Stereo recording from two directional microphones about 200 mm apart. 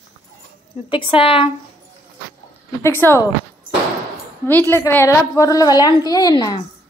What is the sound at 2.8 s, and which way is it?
Speech, 10° left (ahead or behind).